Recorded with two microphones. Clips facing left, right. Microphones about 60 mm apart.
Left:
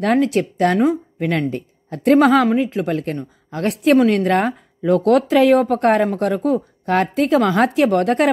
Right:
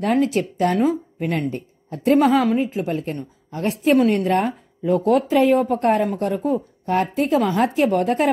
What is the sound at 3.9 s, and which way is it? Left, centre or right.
Speech, left.